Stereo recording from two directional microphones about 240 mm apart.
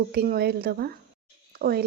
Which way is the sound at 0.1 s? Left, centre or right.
Right.